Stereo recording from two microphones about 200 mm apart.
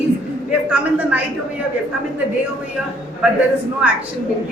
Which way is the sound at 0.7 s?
5° right (ahead or behind).